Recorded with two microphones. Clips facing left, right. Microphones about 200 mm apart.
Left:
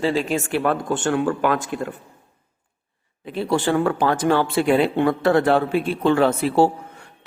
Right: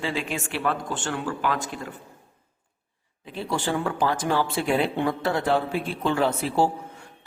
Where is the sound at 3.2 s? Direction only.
65° left (ahead or behind).